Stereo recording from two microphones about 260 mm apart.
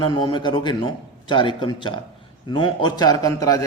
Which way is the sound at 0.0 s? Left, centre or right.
Centre.